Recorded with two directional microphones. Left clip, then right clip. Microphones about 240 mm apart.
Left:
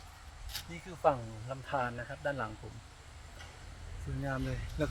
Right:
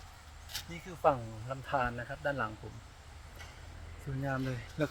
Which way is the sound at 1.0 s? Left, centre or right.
Centre.